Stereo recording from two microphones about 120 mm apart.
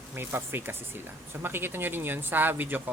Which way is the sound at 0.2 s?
20° right (ahead or behind).